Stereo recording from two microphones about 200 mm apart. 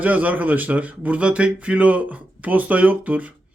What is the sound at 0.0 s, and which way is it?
A man's voice, 10° right (ahead or behind).